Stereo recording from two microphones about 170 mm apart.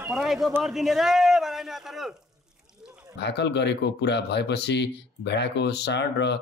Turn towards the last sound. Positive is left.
turn(degrees=90)